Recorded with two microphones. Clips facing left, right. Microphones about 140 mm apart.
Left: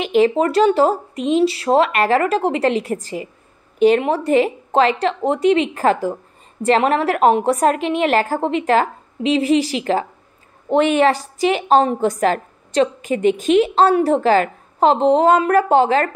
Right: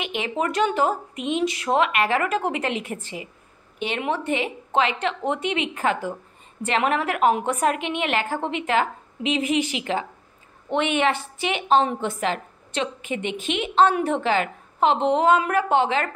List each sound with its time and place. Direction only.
0.0 s a woman's voice: 35° left (ahead or behind)